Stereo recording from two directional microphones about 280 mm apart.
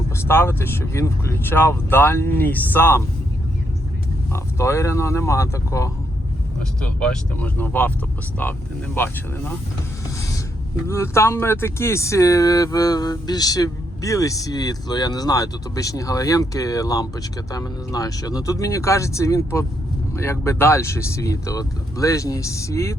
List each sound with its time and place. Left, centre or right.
0.3 s speech: centre
4.3 s speech: centre
9.0 s speech: centre
10.2 s a sound: centre
10.8 s speech: centre